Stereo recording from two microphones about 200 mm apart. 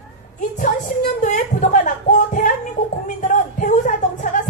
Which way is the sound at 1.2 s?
40° left (ahead or behind).